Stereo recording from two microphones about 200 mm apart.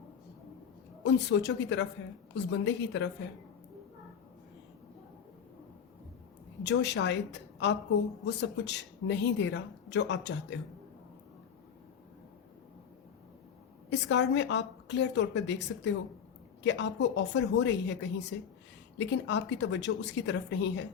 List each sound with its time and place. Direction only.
1.0 s a woman's voice: 60° left (ahead or behind)
6.6 s a woman's voice: 60° left (ahead or behind)
13.9 s a woman's voice: 60° left (ahead or behind)